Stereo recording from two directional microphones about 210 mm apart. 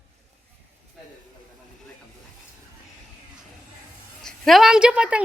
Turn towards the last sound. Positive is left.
turn(degrees=-5)  # may be behind; listen again after turning